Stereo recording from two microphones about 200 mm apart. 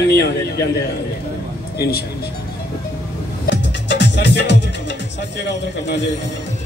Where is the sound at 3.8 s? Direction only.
60° left (ahead or behind).